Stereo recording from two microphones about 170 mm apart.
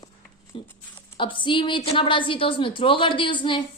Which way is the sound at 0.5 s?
30° left (ahead or behind).